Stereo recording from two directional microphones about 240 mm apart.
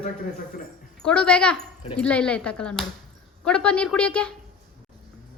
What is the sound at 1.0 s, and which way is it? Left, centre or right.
A woman's voice, centre.